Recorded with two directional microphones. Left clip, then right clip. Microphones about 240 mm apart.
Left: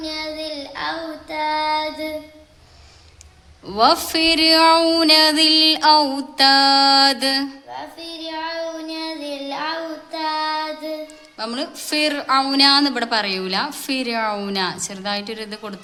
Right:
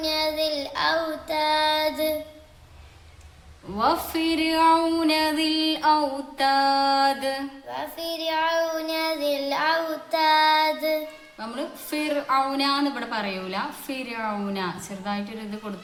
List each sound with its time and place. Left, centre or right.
0.0 s child singing: centre
3.7 s a woman's voice: left
7.7 s child singing: centre
11.3 s a woman's voice: left